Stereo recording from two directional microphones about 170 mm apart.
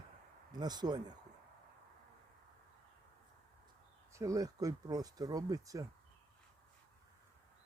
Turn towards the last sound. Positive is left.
turn(degrees=-20)  # may be behind; listen again after turning